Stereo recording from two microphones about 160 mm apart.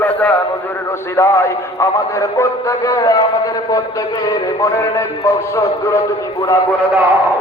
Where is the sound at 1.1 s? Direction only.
15° left (ahead or behind).